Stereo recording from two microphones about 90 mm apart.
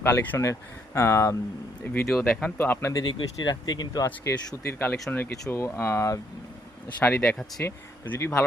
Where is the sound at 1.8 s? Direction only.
15° left (ahead or behind).